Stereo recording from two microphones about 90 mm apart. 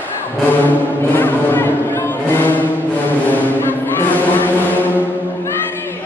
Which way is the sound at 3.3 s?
20° left (ahead or behind).